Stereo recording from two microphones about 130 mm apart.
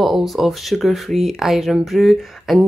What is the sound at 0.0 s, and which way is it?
Speech, centre (ahead or behind).